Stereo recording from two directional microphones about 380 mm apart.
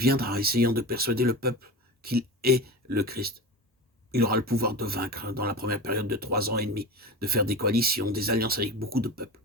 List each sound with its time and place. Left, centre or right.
0.0 s speech: right